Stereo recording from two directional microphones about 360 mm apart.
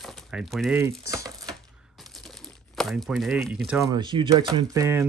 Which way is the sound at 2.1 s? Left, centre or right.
Centre.